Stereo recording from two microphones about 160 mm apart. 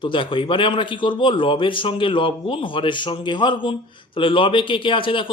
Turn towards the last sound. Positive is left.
turn(degrees=30)  # may be behind; listen again after turning